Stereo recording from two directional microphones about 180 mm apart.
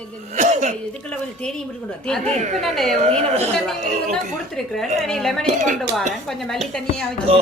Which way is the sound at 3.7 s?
Centre (ahead or behind).